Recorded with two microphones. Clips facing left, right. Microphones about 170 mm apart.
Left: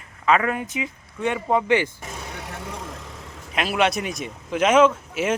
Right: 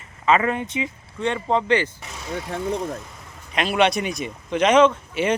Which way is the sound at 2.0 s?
50° left (ahead or behind).